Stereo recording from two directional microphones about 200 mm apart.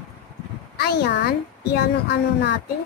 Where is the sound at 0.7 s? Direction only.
50° left (ahead or behind).